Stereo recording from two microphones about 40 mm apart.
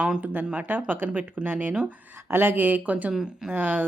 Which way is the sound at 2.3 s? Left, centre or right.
Right.